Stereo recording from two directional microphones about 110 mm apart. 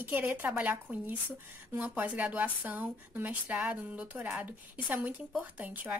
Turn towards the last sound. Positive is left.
turn(degrees=-15)  # may be behind; listen again after turning